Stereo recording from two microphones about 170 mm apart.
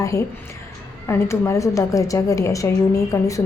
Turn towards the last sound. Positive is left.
turn(degrees=20)  # may be behind; listen again after turning